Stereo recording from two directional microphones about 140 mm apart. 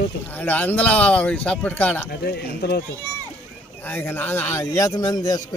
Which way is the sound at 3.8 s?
15° left (ahead or behind).